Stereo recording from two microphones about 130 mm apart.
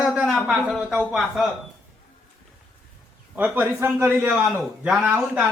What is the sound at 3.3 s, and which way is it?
A man's voice, 15° right (ahead or behind).